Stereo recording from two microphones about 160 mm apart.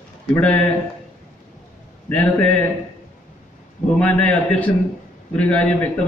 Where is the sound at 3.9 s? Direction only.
10° left (ahead or behind).